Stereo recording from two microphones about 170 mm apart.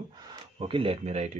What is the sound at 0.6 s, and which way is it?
Speech, 35° right (ahead or behind).